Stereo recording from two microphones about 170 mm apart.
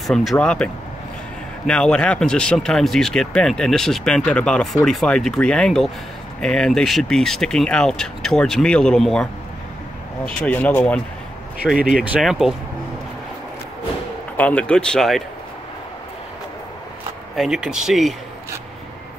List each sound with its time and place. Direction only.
0.0 s speech: centre (ahead or behind)
1.7 s speech: 5° left (ahead or behind)
11.9 s speech: 5° right (ahead or behind)
14.3 s speech: 10° left (ahead or behind)
17.4 s speech: 5° right (ahead or behind)